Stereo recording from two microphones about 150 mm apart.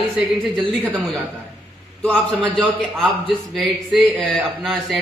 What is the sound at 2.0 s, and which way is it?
A man's voice, 5° left (ahead or behind).